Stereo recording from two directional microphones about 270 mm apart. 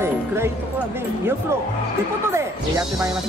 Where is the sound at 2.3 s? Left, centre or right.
Centre.